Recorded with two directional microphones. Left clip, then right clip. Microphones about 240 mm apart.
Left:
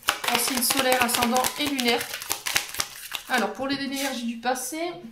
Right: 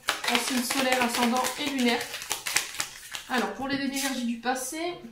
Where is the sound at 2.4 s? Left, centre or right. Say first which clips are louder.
Left 3 dB; left.